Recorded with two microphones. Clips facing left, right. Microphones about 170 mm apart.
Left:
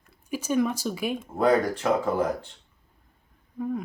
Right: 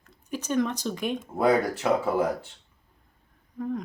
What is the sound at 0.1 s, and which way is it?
Speech, 10° left (ahead or behind).